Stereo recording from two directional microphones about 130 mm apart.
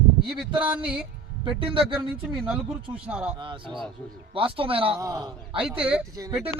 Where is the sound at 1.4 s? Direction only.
40° right (ahead or behind).